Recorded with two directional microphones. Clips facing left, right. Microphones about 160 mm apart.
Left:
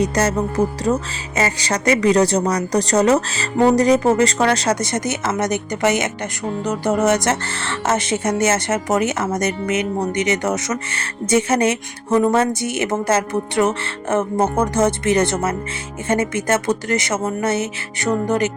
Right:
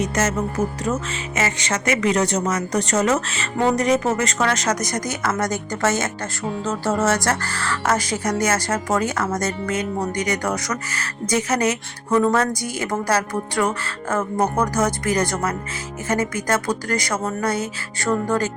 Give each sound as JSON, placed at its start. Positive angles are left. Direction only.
{"t": 0.0, "sound": "a woman's voice", "side_deg": 35}